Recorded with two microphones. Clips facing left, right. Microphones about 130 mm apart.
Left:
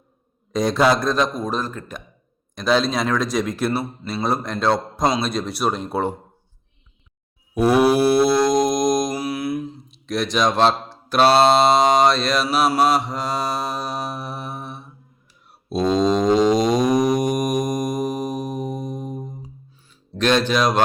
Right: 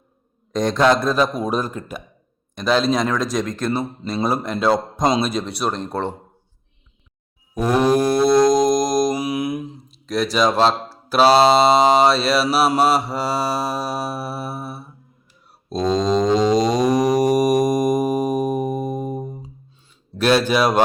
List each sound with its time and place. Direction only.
0.5 s speech: 5° left (ahead or behind); by 2.0 s 10° right (ahead or behind)
2.6 s speech: centre (ahead or behind)
7.6 s mantra: 10° left (ahead or behind)
9.1 s mantra: 15° right (ahead or behind)
9.9 s speech: centre (ahead or behind)
15.7 s a sound: 5° left (ahead or behind)
20.1 s speech: 10° right (ahead or behind)